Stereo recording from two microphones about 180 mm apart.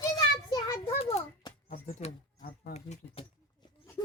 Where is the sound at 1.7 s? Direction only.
40° left (ahead or behind).